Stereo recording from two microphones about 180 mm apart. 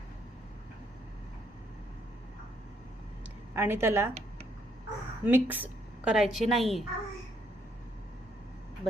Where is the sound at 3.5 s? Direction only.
15° right (ahead or behind).